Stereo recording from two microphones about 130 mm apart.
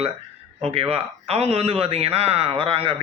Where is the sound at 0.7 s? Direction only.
50° right (ahead or behind).